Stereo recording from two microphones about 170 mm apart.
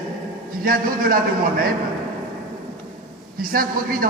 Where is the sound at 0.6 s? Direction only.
55° right (ahead or behind).